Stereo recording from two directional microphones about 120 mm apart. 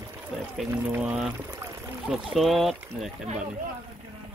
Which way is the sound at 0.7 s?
15° right (ahead or behind).